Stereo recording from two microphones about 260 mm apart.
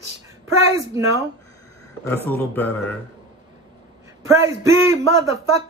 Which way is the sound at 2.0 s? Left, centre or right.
Centre.